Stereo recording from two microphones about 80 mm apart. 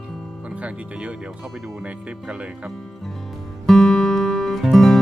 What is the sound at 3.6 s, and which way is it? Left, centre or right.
Music, centre.